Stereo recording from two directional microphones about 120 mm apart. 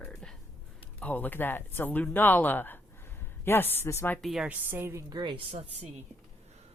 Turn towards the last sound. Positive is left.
turn(degrees=-55)  # may be behind; listen again after turning